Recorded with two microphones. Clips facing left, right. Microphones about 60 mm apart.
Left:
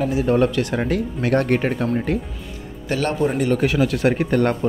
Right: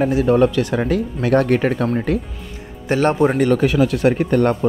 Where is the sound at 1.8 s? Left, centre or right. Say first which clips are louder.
Right 2 dB; right.